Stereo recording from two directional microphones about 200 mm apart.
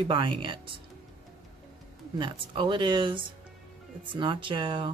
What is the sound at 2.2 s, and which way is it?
A woman's voice, 25° right (ahead or behind).